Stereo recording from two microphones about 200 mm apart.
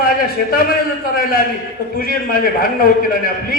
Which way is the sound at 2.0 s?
45° left (ahead or behind).